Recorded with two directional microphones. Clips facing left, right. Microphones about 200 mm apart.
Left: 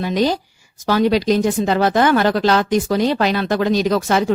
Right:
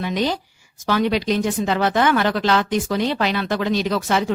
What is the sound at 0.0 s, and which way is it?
A woman's voice, 40° left (ahead or behind).